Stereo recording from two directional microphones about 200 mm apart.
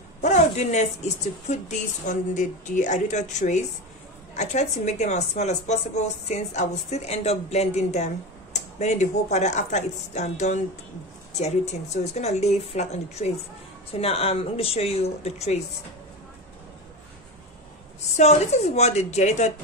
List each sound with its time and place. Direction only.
0.2 s a woman's voice: 35° left (ahead or behind)
18.1 s a woman's voice: 35° left (ahead or behind)